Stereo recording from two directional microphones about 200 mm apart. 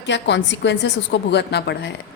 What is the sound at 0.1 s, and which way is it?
A woman's voice, 60° left (ahead or behind).